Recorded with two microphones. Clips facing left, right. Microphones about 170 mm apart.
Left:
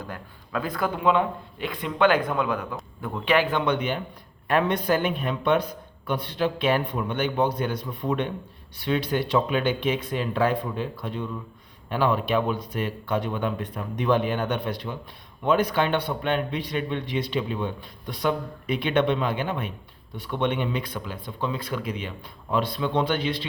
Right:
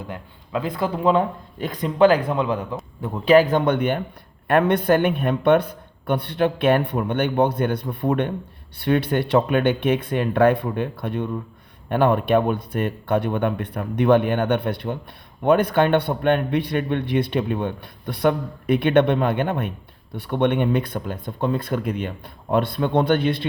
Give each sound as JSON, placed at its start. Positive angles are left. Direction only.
{"t": 0.1, "sound": "a man's voice", "side_deg": -20}